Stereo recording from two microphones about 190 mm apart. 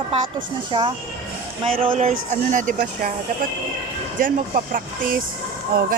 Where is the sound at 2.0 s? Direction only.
35° right (ahead or behind).